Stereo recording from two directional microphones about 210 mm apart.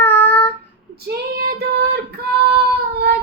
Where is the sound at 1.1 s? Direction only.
50° right (ahead or behind).